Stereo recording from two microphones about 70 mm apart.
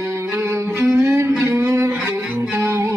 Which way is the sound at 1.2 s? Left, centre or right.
Right.